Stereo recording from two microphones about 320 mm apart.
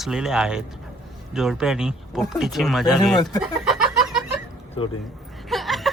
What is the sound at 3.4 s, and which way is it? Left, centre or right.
Chicken, centre.